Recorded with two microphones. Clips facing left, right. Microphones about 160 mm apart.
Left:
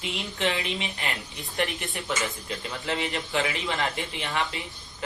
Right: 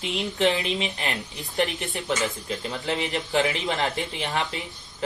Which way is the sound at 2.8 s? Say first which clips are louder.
Right 1 dB; 35° right (ahead or behind).